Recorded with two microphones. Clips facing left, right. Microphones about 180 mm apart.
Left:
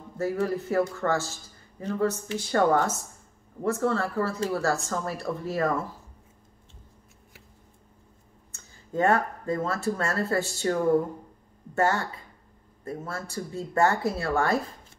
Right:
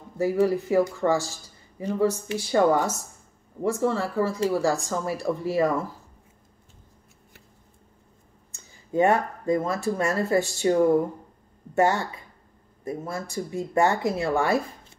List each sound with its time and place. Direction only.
0.2 s speech: 10° right (ahead or behind)
8.9 s speech: 15° right (ahead or behind)